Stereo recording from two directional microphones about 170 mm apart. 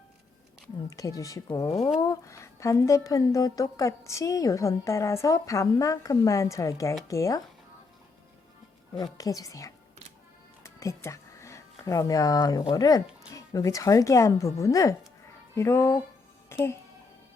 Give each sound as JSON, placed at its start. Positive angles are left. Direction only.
{"t": 0.9, "sound": "speech", "side_deg": 20}
{"t": 9.1, "sound": "speech", "side_deg": 20}